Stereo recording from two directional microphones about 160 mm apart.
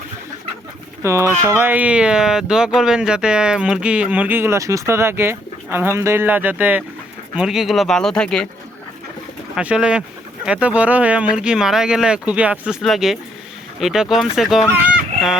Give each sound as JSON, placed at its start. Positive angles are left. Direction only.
{"t": 1.0, "sound": "speech", "side_deg": -15}
{"t": 9.6, "sound": "speech", "side_deg": -5}